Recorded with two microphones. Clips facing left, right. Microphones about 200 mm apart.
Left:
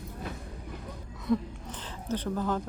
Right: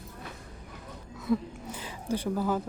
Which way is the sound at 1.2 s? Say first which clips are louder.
Even; 10° right (ahead or behind).